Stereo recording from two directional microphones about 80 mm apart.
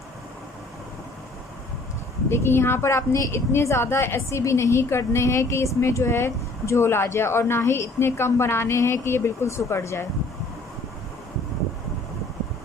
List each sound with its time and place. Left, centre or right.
2.3 s a woman's voice: left